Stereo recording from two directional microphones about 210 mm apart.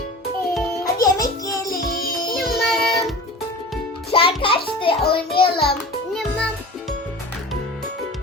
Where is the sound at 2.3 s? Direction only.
Centre (ahead or behind).